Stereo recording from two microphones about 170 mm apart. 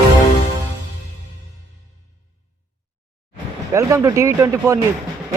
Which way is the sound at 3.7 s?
20° right (ahead or behind).